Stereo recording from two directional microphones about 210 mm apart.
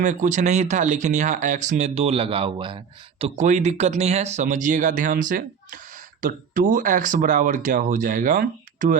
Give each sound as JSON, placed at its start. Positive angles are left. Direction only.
{"t": 0.0, "sound": "speech", "side_deg": -35}